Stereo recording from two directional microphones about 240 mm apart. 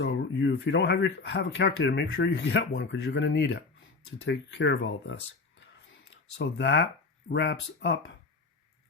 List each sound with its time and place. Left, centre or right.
0.0 s speech: left
6.4 s speech: left